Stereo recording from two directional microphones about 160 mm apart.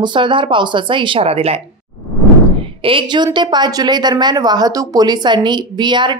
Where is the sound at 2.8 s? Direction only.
30° right (ahead or behind).